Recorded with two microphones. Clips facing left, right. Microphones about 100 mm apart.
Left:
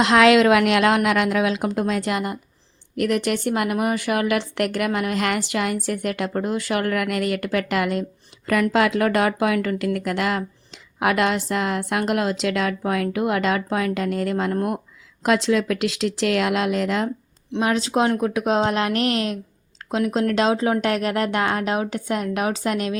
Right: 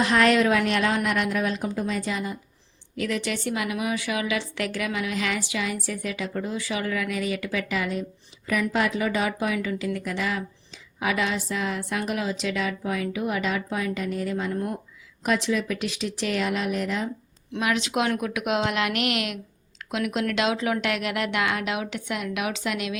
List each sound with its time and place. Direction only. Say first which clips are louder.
0.0 s a woman's voice: left 5 dB; 90° left; by 14.8 s 70° left (ahead or behind)
15.2 s speech: left 5 dB; 85° left
17.5 s speech: left 5 dB; 35° left (ahead or behind)